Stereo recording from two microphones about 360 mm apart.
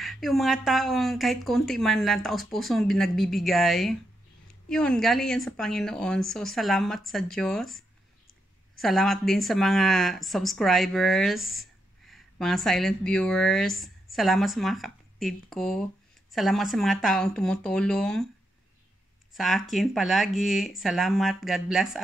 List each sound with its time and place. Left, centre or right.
0.0 s speech: centre
19.3 s speech: centre